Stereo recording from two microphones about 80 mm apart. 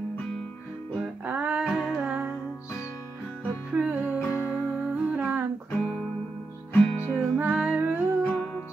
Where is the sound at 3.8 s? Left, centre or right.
Right.